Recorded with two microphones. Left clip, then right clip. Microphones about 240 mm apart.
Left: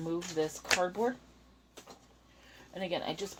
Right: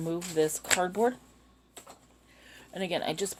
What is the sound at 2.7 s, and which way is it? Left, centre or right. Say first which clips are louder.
Speech: right 4 dB; right.